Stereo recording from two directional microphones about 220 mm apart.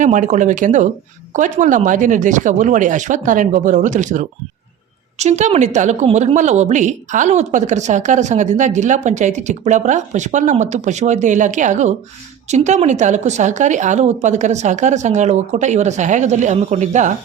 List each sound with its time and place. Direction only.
0.0 s a woman's voice: 35° right (ahead or behind)